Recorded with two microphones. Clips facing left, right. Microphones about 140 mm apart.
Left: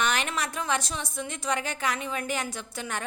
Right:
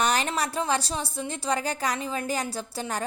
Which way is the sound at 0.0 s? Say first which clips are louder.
Right 3 dB; 35° right (ahead or behind).